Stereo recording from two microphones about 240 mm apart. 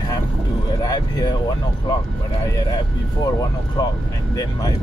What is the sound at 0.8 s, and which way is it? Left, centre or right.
Speech, centre.